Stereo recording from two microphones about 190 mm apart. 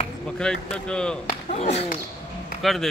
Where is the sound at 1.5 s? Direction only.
35° left (ahead or behind).